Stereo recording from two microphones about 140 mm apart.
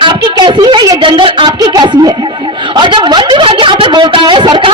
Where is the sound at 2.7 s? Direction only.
35° right (ahead or behind).